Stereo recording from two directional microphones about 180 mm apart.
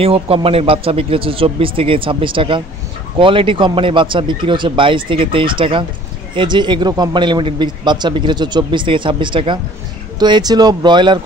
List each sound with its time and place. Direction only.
0.0 s speech: 30° right (ahead or behind)